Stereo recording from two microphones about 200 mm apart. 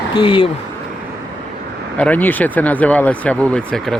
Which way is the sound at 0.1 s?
25° left (ahead or behind).